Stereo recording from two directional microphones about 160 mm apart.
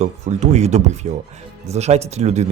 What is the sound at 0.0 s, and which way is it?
A man's voice, 45° right (ahead or behind).